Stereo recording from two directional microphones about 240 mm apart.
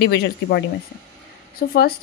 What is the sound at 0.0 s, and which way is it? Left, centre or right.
Speech, left.